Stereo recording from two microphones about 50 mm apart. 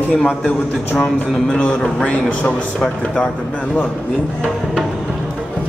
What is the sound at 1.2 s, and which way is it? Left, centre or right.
Speech, centre.